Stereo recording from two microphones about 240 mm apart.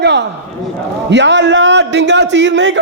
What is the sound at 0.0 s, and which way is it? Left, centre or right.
A man's voice, right.